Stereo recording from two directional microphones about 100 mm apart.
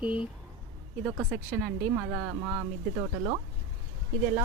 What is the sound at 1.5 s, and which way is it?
Speech, centre (ahead or behind).